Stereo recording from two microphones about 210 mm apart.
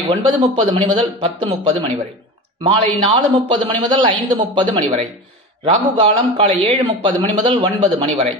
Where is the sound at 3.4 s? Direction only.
25° right (ahead or behind).